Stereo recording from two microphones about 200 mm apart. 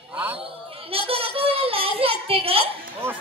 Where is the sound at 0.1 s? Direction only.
10° right (ahead or behind).